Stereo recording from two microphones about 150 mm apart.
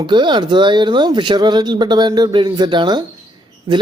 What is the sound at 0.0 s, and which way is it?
Speech, 30° right (ahead or behind).